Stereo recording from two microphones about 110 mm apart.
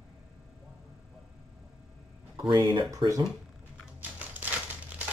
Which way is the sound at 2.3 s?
45° right (ahead or behind).